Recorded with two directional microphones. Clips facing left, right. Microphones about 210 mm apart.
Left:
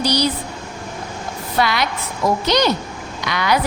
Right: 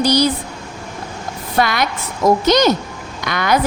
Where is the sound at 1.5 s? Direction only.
50° right (ahead or behind).